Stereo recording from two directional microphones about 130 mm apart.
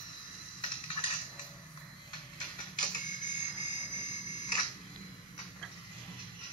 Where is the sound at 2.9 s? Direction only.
35° left (ahead or behind).